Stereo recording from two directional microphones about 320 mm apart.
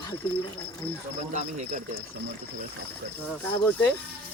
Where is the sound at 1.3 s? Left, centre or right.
Right.